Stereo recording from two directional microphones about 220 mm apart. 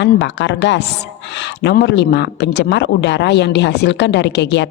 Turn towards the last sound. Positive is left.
turn(degrees=50)  # may be behind; listen again after turning